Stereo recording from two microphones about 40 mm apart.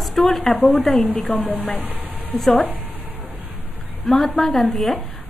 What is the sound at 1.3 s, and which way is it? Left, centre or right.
Speech, left.